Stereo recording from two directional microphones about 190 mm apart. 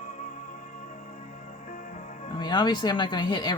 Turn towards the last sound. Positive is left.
turn(degrees=20)  # may be behind; listen again after turning